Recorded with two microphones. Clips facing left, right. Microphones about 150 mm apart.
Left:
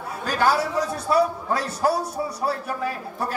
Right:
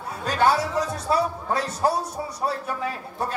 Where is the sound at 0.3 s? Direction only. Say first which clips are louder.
Right 1 dB; 25° right (ahead or behind).